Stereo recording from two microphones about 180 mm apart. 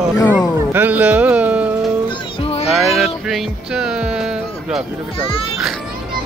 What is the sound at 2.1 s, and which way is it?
Music, 35° left (ahead or behind).